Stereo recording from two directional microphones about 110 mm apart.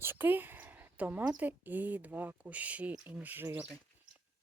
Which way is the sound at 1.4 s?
15° right (ahead or behind).